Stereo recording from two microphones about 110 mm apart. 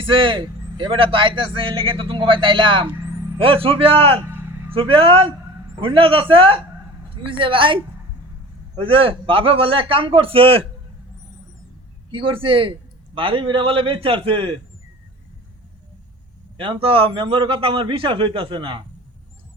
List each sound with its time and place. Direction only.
0.0 s a man's voice: 50° right (ahead or behind)
4.3 s a sound: 20° right (ahead or behind)
4.7 s a man's voice: 55° right (ahead or behind)
12.1 s a man's voice: 55° right (ahead or behind)
16.6 s a man's voice: 55° right (ahead or behind)